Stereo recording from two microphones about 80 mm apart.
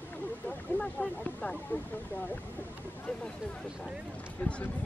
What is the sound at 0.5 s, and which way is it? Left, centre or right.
Speech, centre.